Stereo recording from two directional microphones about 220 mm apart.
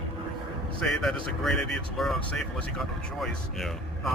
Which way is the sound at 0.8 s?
Centre (ahead or behind).